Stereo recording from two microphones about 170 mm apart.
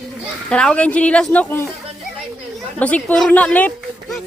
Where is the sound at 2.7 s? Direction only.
10° left (ahead or behind).